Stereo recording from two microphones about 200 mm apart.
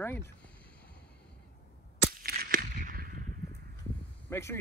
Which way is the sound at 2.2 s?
50° right (ahead or behind).